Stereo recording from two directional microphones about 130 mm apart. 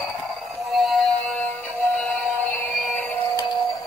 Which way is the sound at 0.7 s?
Centre (ahead or behind).